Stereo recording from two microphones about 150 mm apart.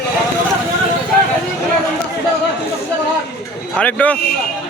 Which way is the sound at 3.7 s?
10° left (ahead or behind).